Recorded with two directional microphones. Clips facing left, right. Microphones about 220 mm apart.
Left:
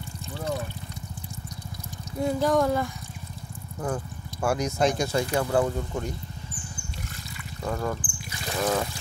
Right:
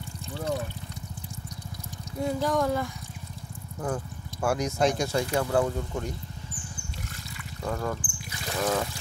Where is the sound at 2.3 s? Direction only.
45° left (ahead or behind).